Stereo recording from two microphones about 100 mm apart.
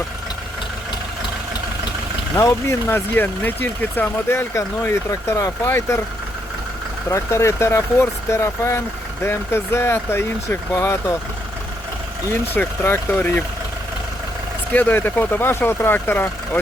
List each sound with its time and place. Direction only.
2.3 s speech: 30° left (ahead or behind)
7.1 s speech: 30° left (ahead or behind)
12.3 s speech: 20° left (ahead or behind)
14.7 s speech: 20° left (ahead or behind)